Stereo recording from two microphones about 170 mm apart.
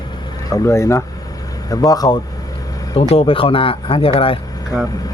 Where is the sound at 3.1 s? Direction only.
35° left (ahead or behind).